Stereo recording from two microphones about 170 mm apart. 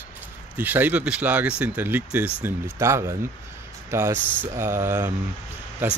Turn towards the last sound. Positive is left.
turn(degrees=-15)  # may be behind; listen again after turning